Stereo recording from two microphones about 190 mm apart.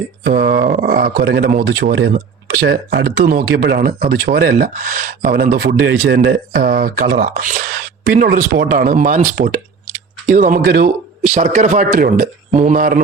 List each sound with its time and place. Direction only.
0.3 s speech: 55° right (ahead or behind)